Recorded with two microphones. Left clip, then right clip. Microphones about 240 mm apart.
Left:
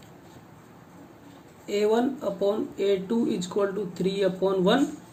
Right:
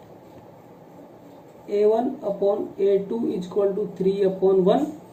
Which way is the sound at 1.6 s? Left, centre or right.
Left.